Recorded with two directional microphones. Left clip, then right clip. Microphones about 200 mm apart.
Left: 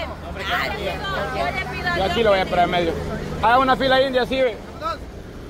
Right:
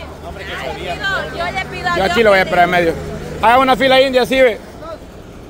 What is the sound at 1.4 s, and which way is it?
A man's voice, 55° right (ahead or behind).